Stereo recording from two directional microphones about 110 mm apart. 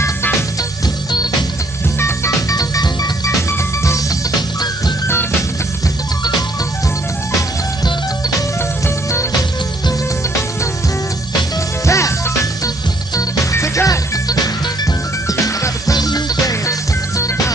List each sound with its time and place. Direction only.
2.0 s music: 25° left (ahead or behind)
2.5 s music: 35° left (ahead or behind)
11.8 s music: 30° left (ahead or behind)